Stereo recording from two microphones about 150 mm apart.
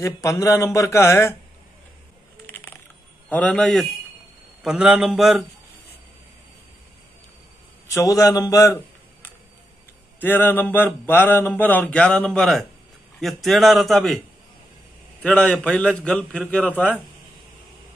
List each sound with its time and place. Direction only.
0.0 s speech: 20° left (ahead or behind)
2.5 s coin: 15° left (ahead or behind)
3.3 s a man's voice: 10° left (ahead or behind)
7.9 s speech: 20° left (ahead or behind)
10.2 s a man's voice: 15° left (ahead or behind)
15.2 s speech: 5° left (ahead or behind)